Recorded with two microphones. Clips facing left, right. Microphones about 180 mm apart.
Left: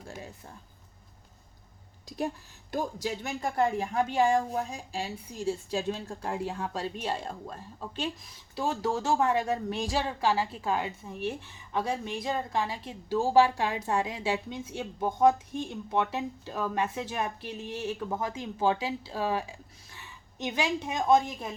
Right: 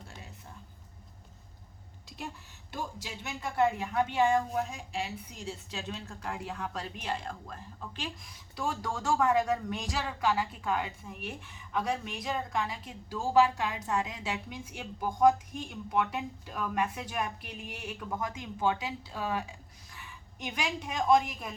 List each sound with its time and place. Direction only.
2.0 s speech: 40° left (ahead or behind)